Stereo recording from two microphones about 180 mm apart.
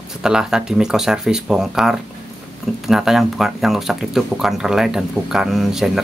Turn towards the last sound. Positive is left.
turn(degrees=0)  # may be behind; listen again after turning